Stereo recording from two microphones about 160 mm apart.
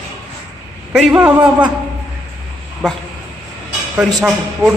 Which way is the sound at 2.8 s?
5° left (ahead or behind).